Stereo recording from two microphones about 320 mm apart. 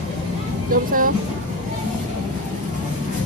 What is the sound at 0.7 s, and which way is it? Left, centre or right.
Speech, right.